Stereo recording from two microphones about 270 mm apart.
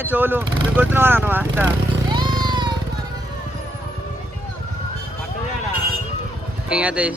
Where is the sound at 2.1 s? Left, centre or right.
Centre.